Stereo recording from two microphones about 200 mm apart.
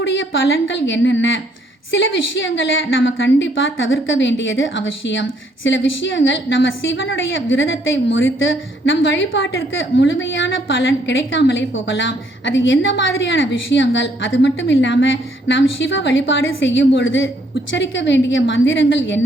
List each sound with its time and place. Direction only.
0.0 s a woman's voice: 70° left (ahead or behind)